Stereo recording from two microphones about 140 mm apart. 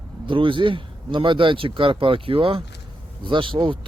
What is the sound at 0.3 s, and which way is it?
Speech, 40° right (ahead or behind).